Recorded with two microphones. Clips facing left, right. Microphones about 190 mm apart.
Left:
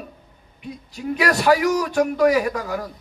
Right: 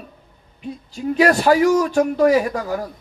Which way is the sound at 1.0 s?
35° right (ahead or behind).